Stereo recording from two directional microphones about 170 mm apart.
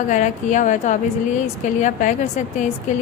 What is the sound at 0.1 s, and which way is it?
A woman's voice, 45° left (ahead or behind).